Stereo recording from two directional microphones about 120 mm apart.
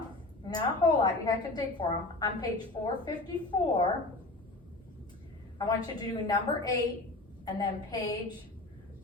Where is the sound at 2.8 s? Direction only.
45° left (ahead or behind).